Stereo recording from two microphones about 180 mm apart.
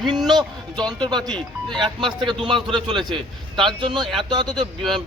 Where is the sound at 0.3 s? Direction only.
25° right (ahead or behind).